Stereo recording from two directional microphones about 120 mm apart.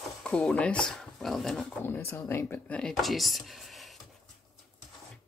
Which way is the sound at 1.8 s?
15° left (ahead or behind).